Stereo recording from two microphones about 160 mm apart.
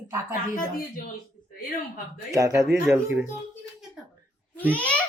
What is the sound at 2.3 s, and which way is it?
Speech, 20° right (ahead or behind).